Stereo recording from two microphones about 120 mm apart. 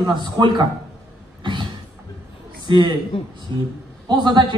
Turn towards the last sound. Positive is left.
turn(degrees=-40)  # may be behind; listen again after turning